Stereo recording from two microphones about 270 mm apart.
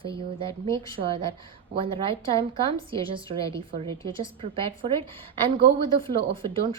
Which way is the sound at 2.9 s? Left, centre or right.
Centre.